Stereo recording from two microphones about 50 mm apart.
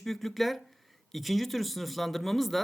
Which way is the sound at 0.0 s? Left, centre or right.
Centre.